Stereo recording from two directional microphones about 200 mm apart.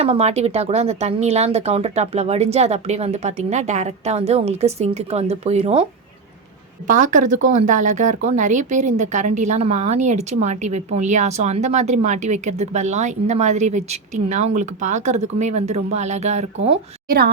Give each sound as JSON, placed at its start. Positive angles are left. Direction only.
{"t": 0.0, "sound": "a woman's voice", "side_deg": -30}
{"t": 6.8, "sound": "a woman's voice", "side_deg": -40}